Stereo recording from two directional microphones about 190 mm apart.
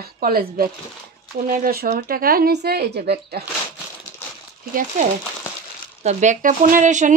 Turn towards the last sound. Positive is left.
turn(degrees=-40)  # may be behind; listen again after turning